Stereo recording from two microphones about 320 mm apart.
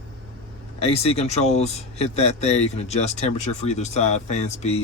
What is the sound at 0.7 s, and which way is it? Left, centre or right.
Speech, centre.